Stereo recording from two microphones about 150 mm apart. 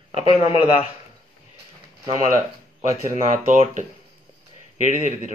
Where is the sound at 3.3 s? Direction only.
55° right (ahead or behind).